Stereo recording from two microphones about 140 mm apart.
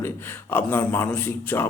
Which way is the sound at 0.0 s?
15° left (ahead or behind).